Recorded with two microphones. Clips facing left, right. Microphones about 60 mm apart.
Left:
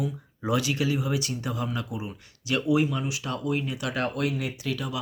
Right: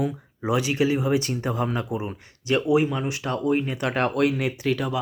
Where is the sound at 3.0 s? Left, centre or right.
Right.